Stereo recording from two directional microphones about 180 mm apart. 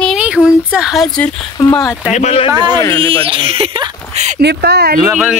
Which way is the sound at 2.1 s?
35° left (ahead or behind).